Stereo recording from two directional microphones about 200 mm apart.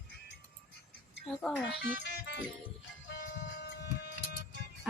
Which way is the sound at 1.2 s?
Centre (ahead or behind).